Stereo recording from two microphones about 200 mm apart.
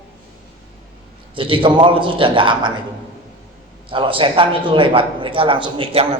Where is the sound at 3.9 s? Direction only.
25° right (ahead or behind).